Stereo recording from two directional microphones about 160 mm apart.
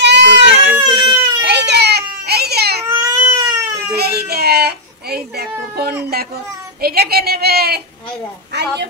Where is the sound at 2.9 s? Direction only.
25° right (ahead or behind).